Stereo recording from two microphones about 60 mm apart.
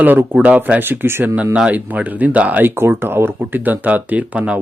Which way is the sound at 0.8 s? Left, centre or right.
Right.